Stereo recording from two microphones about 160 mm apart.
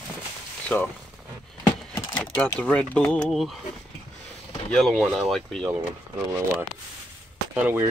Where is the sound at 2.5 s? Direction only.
10° left (ahead or behind).